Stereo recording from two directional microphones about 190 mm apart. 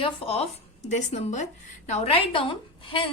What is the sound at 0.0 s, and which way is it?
A woman's voice, 30° left (ahead or behind).